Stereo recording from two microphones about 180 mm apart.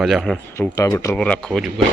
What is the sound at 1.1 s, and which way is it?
Speech, 5° left (ahead or behind).